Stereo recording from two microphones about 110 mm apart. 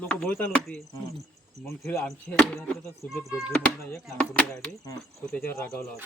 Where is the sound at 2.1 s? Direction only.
5° left (ahead or behind).